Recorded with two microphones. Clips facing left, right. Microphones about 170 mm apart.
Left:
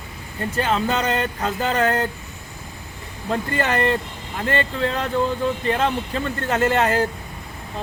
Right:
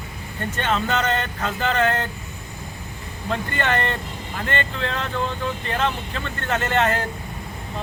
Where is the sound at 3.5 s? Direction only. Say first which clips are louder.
Left 4 dB; 35° left (ahead or behind).